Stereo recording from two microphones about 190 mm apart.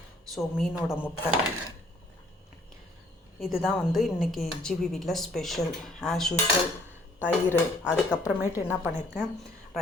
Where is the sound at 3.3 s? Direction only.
Centre (ahead or behind).